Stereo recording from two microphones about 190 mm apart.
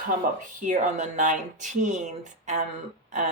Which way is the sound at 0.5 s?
40° right (ahead or behind).